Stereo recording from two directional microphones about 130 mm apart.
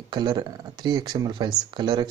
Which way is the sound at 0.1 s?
30° right (ahead or behind).